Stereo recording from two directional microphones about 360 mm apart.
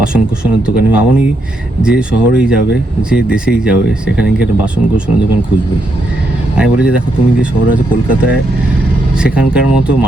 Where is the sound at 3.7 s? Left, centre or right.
Left.